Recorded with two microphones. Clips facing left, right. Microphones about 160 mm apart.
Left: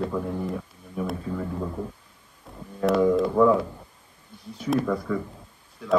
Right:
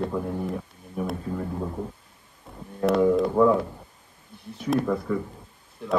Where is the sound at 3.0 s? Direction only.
5° right (ahead or behind).